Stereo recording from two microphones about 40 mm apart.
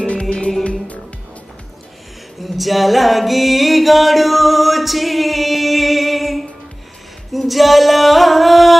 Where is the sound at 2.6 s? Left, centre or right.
Centre.